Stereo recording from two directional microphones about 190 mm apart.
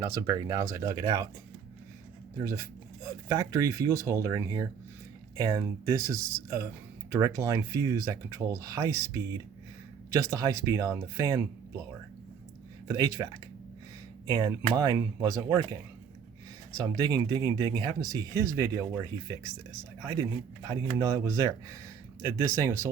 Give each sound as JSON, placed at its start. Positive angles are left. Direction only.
{"t": 0.0, "sound": "speech", "side_deg": -15}
{"t": 2.4, "sound": "speech", "side_deg": -15}
{"t": 12.9, "sound": "speech", "side_deg": -15}
{"t": 14.3, "sound": "speech", "side_deg": -20}
{"t": 20.7, "sound": "speech", "side_deg": -20}